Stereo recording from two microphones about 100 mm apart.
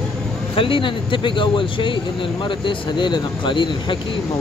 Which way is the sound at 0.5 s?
60° left (ahead or behind).